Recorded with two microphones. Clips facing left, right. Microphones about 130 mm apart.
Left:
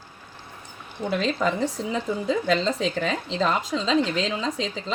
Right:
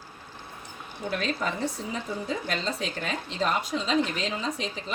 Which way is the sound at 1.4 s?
90° left.